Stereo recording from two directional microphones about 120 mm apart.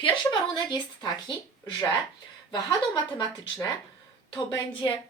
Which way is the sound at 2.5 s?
35° left (ahead or behind).